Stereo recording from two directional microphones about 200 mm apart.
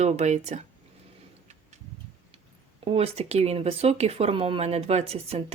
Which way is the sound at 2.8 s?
30° right (ahead or behind).